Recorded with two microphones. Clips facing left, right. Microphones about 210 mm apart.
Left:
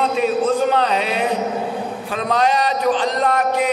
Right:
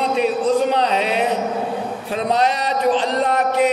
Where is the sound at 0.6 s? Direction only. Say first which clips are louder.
Even; 30° right (ahead or behind).